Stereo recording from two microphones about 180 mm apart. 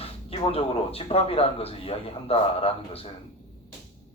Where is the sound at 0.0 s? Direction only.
35° left (ahead or behind).